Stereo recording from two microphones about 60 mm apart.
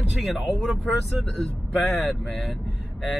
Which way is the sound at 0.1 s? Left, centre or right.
Centre.